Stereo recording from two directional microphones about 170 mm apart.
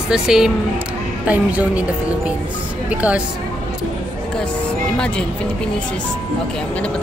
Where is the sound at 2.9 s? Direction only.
5° right (ahead or behind).